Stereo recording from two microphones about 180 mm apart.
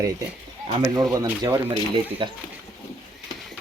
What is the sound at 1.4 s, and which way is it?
Speech, 25° right (ahead or behind).